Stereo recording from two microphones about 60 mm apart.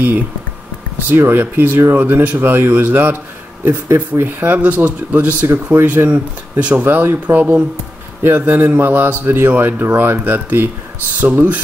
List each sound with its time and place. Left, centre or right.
1.0 s speech: right
9.5 s speech: right